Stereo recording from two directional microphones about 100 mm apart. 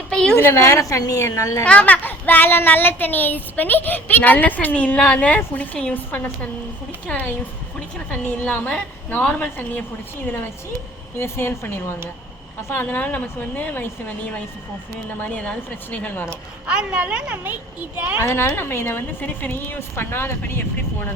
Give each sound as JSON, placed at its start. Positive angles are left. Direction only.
{"t": 0.1, "sound": "a sound", "side_deg": 10}
{"t": 0.3, "sound": "a woman's voice", "side_deg": 25}
{"t": 1.6, "sound": "a child's voice", "side_deg": 15}
{"t": 11.2, "sound": "a woman's voice", "side_deg": 25}
{"t": 16.6, "sound": "a woman's voice", "side_deg": -10}
{"t": 18.2, "sound": "a woman's voice", "side_deg": 25}